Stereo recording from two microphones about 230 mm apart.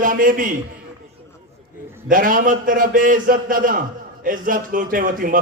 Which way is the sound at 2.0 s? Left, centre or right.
Right.